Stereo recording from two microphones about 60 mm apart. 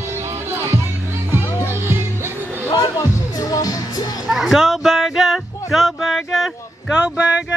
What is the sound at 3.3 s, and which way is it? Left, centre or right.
Music, left.